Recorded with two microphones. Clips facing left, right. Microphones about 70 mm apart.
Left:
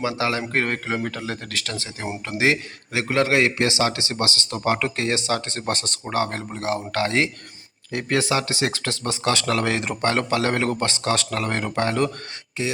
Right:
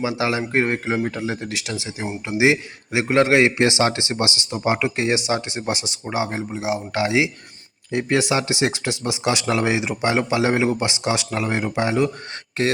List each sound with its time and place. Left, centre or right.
0.0 s a man's voice: centre
12.6 s speech: right